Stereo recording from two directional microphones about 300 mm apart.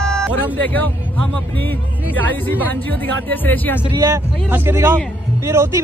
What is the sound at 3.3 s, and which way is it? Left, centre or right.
Speech, centre.